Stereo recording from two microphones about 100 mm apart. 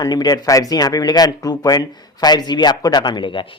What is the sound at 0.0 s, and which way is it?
Speech, 40° left (ahead or behind).